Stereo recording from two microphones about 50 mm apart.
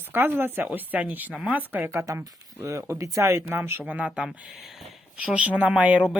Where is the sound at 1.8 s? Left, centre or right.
Right.